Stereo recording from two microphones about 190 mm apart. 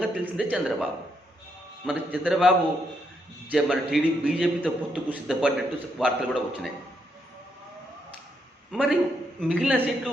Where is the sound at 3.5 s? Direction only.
Centre (ahead or behind).